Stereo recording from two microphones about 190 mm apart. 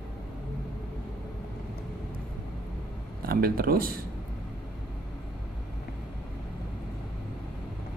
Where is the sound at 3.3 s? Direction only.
50° right (ahead or behind).